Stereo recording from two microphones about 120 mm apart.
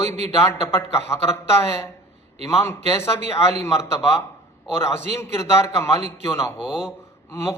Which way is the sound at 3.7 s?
20° left (ahead or behind).